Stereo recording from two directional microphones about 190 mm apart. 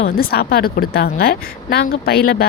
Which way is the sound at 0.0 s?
55° left (ahead or behind).